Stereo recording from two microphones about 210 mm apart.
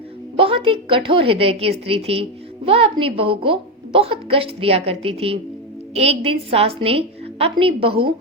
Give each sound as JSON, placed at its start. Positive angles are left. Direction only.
{"t": 0.3, "sound": "a woman's voice", "side_deg": -25}